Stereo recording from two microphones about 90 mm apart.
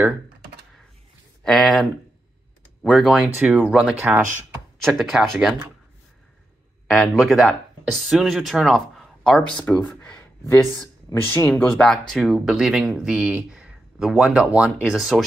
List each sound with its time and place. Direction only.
1.4 s speech: 5° left (ahead or behind)
3.2 s speech: 15° right (ahead or behind)
4.9 s speech: centre (ahead or behind)
6.9 s speech: centre (ahead or behind)
9.7 s speech: 20° left (ahead or behind)
12.1 s speech: centre (ahead or behind)